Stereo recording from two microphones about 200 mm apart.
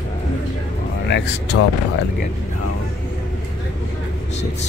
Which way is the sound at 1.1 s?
65° left (ahead or behind).